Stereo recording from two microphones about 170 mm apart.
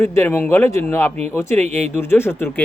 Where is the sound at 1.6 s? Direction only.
40° right (ahead or behind).